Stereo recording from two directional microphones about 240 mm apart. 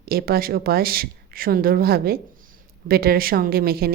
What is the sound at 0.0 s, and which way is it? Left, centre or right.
A woman's voice, right.